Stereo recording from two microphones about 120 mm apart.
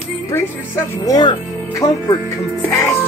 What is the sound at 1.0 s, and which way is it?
Speech, 35° left (ahead or behind).